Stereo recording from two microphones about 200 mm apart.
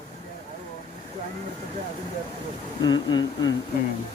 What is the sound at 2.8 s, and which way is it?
Speech, 20° left (ahead or behind).